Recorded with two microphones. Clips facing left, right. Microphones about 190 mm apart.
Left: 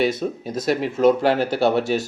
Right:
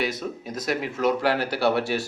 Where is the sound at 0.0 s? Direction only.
25° left (ahead or behind).